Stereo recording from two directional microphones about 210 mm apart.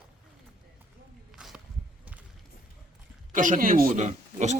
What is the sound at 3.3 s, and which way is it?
A man's voice, 40° right (ahead or behind).